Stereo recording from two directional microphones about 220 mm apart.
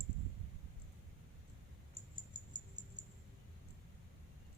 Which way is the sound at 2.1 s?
20° right (ahead or behind).